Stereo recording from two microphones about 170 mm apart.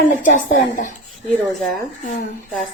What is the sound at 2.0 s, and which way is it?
Speech, 50° left (ahead or behind).